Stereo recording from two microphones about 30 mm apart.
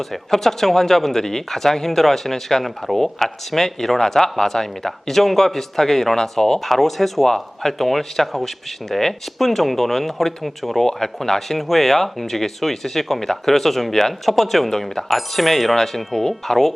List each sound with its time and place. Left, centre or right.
0.1 s speech: centre
14.7 s speech: centre
15.1 s speech: centre